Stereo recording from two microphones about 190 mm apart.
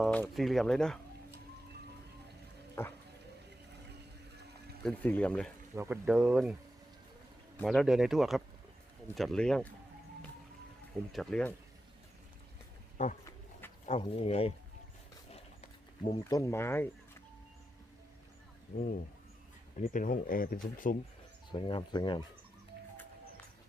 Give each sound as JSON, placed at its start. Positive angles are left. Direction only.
{"t": 0.0, "sound": "speech", "side_deg": 5}
{"t": 2.8, "sound": "speech", "side_deg": 15}
{"t": 4.8, "sound": "speech", "side_deg": 5}
{"t": 5.7, "sound": "speech", "side_deg": -10}
{"t": 11.1, "sound": "speech", "side_deg": 5}
{"t": 13.0, "sound": "speech", "side_deg": 40}
{"t": 15.3, "sound": "horse", "side_deg": 35}
{"t": 16.1, "sound": "speech", "side_deg": 15}
{"t": 19.9, "sound": "speech", "side_deg": 45}
{"t": 21.5, "sound": "speech", "side_deg": 25}